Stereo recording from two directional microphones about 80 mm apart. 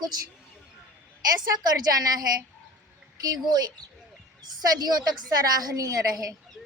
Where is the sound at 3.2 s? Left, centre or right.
Right.